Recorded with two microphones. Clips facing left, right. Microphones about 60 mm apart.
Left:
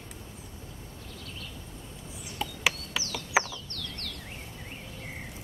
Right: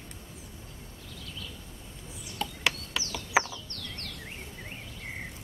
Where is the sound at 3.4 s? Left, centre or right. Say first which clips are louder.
Left 1 dB; right.